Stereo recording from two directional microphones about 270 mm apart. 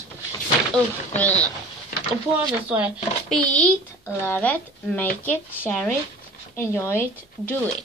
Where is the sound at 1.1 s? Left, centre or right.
Centre.